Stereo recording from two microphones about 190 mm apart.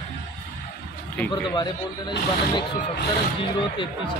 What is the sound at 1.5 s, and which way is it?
Speech, 25° left (ahead or behind).